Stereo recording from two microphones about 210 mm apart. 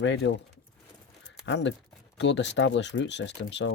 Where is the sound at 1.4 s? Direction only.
60° left (ahead or behind).